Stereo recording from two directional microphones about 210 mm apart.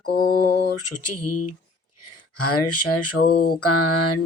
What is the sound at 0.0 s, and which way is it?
Mantra, 45° left (ahead or behind).